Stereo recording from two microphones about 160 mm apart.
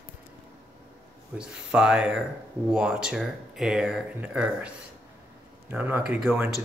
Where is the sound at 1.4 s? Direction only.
5° right (ahead or behind).